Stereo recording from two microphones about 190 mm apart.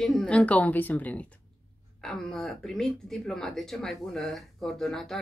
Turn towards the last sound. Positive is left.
turn(degrees=0)  # may be behind; listen again after turning